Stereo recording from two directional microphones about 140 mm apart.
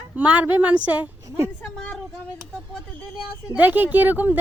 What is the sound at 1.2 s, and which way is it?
Speech, 20° right (ahead or behind).